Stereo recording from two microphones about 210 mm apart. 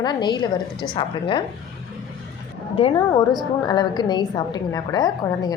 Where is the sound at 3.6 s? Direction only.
20° left (ahead or behind).